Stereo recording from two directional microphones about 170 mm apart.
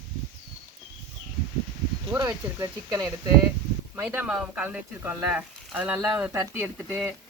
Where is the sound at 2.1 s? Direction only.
20° right (ahead or behind).